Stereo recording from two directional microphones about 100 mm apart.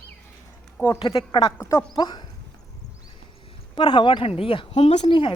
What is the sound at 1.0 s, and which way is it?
Speech, 55° left (ahead or behind).